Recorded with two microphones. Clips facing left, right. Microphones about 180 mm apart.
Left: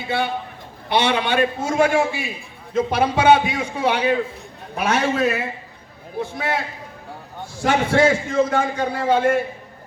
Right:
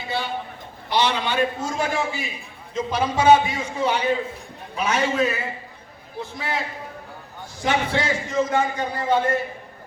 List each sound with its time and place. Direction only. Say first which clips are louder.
0.9 s a man's voice: left 3 dB; 60° left (ahead or behind)
7.6 s a man's voice: left 6 dB; 55° left (ahead or behind)